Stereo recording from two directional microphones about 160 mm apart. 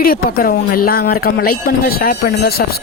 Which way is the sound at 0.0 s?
65° left (ahead or behind).